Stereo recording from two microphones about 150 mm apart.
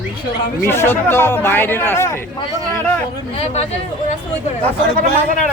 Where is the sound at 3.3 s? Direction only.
45° left (ahead or behind).